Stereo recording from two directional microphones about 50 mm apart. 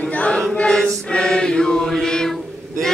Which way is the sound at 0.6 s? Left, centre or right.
Centre.